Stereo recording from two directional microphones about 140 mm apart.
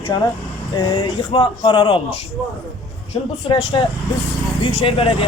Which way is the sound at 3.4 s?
35° left (ahead or behind).